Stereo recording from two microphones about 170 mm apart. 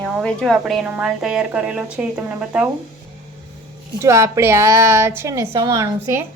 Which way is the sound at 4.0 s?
15° right (ahead or behind).